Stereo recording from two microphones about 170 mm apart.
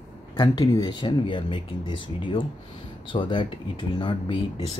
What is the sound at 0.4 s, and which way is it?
Speech, 25° left (ahead or behind).